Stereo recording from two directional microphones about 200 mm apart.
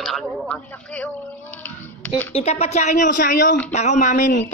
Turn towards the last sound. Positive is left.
turn(degrees=35)  # may be behind; listen again after turning